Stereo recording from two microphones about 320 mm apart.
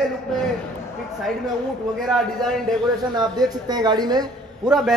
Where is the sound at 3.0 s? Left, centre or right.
Centre.